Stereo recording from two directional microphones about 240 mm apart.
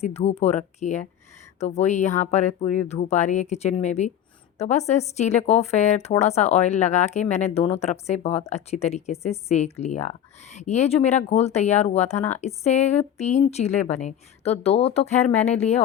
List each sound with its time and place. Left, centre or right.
0.0 s speech: left